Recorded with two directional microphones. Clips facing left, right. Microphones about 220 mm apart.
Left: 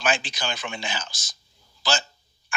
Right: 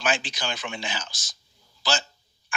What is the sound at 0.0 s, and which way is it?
Speech, 50° left (ahead or behind).